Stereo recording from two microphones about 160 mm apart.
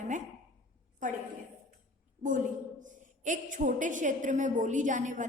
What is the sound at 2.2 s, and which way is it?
A woman's voice, 55° right (ahead or behind).